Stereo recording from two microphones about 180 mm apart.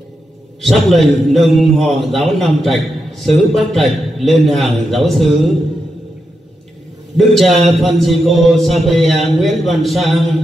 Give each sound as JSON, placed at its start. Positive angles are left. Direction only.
{"t": 0.6, "sound": "a man's voice", "side_deg": 0}
{"t": 7.2, "sound": "a man's voice", "side_deg": 0}